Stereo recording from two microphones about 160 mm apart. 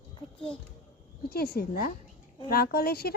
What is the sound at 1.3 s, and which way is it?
Speech, 75° left (ahead or behind).